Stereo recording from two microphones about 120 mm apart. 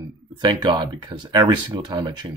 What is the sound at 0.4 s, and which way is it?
Speech, 40° right (ahead or behind).